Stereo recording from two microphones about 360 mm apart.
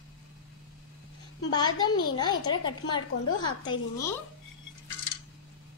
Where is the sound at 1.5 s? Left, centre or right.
Centre.